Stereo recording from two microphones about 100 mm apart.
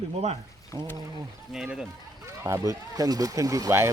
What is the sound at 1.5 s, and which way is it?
Speech, 5° right (ahead or behind).